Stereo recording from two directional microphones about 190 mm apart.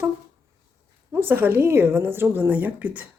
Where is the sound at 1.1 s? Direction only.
10° right (ahead or behind).